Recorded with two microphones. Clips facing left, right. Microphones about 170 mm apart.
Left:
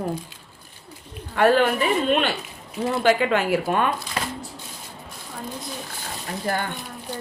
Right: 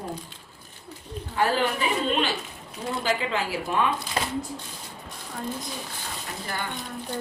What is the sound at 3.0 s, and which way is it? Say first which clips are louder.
Speech: left 7 dB; 65° left (ahead or behind).